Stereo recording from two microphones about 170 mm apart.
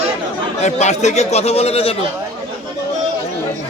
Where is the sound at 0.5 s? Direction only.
40° left (ahead or behind).